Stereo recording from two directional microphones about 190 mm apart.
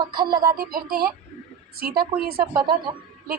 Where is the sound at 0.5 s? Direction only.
50° right (ahead or behind).